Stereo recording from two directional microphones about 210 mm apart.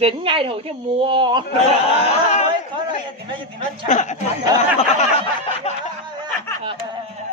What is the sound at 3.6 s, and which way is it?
Speech, 35° left (ahead or behind).